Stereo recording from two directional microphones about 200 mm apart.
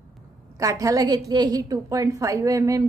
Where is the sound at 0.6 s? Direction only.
15° right (ahead or behind).